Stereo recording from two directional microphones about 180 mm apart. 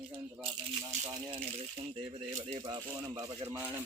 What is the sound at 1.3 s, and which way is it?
Speech, 35° right (ahead or behind).